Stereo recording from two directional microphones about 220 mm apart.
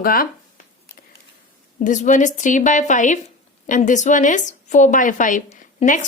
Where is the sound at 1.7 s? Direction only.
35° left (ahead or behind).